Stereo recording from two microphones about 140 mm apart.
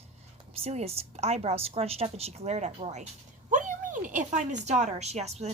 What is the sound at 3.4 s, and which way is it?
A woman's voice, 65° right (ahead or behind).